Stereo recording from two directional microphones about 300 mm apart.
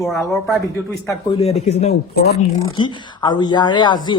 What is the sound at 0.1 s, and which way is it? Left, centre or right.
Speech, centre.